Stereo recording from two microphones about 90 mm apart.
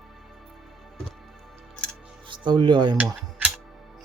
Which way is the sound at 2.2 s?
65° right (ahead or behind).